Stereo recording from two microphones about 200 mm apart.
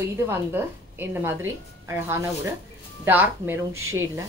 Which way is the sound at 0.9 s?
10° right (ahead or behind).